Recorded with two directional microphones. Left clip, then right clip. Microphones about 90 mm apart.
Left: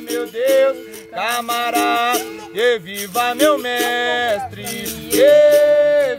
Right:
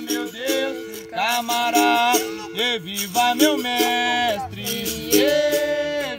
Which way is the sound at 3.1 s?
25° left (ahead or behind).